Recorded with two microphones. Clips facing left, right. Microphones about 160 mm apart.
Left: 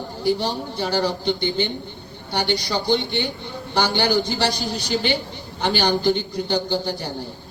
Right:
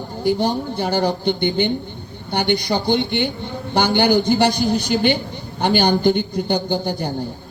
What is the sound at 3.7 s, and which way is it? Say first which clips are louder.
A man's voice: right 4 dB; 55° right (ahead or behind).